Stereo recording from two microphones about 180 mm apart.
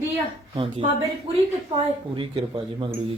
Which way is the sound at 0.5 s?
30° right (ahead or behind).